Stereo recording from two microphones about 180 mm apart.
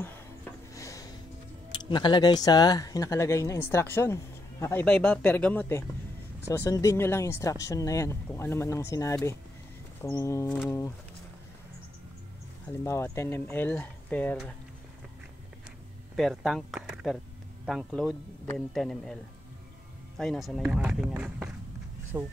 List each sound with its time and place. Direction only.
0.7 s music: 20° left (ahead or behind)
1.7 s speech: 25° left (ahead or behind)
12.8 s speech: 15° left (ahead or behind)
16.2 s speech: centre (ahead or behind)
20.2 s speech: centre (ahead or behind)